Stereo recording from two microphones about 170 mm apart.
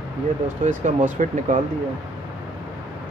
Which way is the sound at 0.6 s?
50° right (ahead or behind).